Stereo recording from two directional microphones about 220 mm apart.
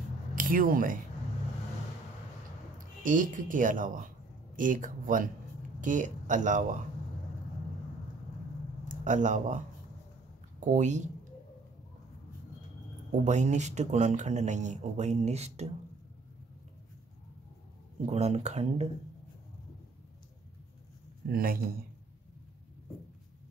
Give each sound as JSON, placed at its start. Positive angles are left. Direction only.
{"t": 0.4, "sound": "speech", "side_deg": -40}
{"t": 3.0, "sound": "speech", "side_deg": -35}
{"t": 9.0, "sound": "speech", "side_deg": -35}
{"t": 10.6, "sound": "speech", "side_deg": -35}
{"t": 13.1, "sound": "speech", "side_deg": -35}
{"t": 18.0, "sound": "speech", "side_deg": -30}
{"t": 21.3, "sound": "speech", "side_deg": -40}